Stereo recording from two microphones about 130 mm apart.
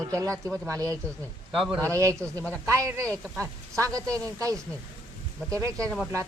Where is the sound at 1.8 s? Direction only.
25° right (ahead or behind).